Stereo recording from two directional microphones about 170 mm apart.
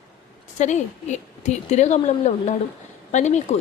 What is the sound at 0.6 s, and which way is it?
Speech, 45° left (ahead or behind).